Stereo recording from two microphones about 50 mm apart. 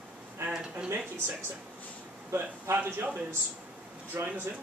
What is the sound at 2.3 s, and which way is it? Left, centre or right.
Speech, right.